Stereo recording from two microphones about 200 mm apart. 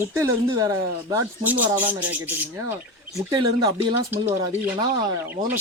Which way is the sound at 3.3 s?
20° right (ahead or behind).